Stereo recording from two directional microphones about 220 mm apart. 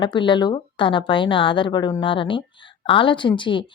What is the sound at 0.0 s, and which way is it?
Speech, 20° left (ahead or behind).